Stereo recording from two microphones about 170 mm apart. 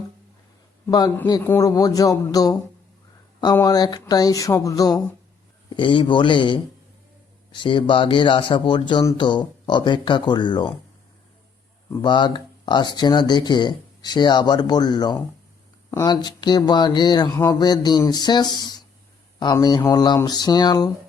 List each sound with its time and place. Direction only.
0.9 s speech: 20° left (ahead or behind)
3.6 s speech: 20° left (ahead or behind)
12.0 s speech: 25° left (ahead or behind)